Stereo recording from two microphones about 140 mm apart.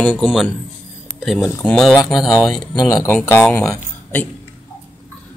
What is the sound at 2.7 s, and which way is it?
Speech, 25° left (ahead or behind).